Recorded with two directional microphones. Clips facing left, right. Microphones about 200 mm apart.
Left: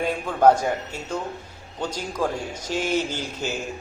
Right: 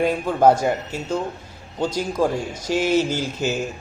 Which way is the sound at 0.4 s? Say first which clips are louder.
Right 1 dB; 10° right (ahead or behind).